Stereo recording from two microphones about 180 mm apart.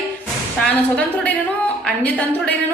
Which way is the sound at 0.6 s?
5° left (ahead or behind).